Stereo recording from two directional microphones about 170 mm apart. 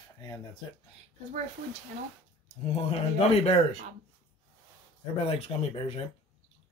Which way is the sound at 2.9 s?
35° left (ahead or behind).